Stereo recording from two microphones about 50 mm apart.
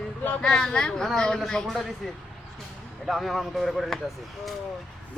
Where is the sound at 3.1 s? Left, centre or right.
Centre.